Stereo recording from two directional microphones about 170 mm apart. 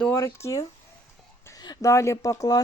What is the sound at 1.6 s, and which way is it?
Speech, 20° left (ahead or behind).